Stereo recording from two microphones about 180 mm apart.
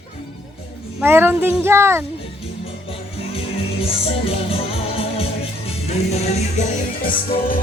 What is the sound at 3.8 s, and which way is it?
Music, 30° left (ahead or behind).